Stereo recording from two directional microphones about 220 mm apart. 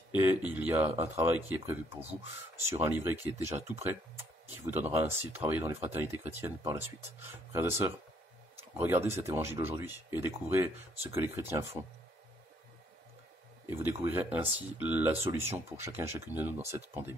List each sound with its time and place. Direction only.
0.1 s speech: 10° right (ahead or behind)
13.7 s speech: 10° right (ahead or behind)